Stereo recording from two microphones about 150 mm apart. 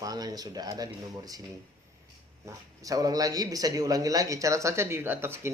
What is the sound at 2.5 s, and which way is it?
Speech, 25° right (ahead or behind).